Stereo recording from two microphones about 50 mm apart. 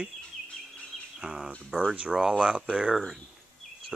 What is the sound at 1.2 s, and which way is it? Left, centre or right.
Speech, centre.